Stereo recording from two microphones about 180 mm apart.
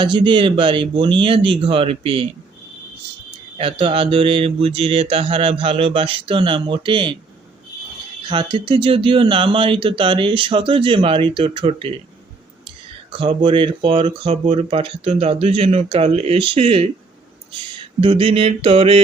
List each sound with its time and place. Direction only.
0.0 s speech: 25° right (ahead or behind)
3.6 s speech: 30° right (ahead or behind)
8.3 s speech: 25° right (ahead or behind)